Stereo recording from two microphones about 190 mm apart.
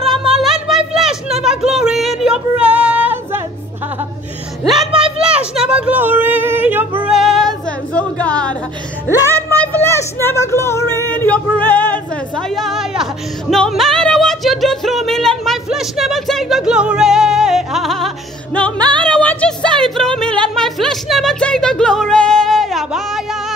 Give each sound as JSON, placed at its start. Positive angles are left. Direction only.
{"t": 0.0, "sound": "music", "side_deg": 0}
{"t": 0.4, "sound": "a sound", "side_deg": 0}
{"t": 4.6, "sound": "music", "side_deg": 0}
{"t": 5.2, "sound": "a sound", "side_deg": -5}
{"t": 9.3, "sound": "female singing", "side_deg": 10}
{"t": 18.8, "sound": "music", "side_deg": -25}
{"t": 19.0, "sound": "music", "side_deg": 5}